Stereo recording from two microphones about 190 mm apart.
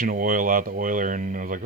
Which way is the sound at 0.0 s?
45° right (ahead or behind).